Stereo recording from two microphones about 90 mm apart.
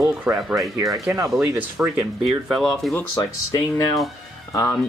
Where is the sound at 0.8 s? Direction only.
35° right (ahead or behind).